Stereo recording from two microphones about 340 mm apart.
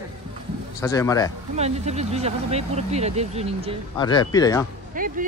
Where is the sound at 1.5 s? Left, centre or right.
Centre.